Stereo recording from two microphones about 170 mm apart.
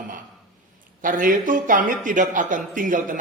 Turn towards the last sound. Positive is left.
turn(degrees=-50)  # may be behind; listen again after turning